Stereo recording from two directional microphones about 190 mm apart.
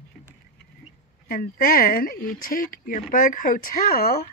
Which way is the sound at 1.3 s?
50° left (ahead or behind).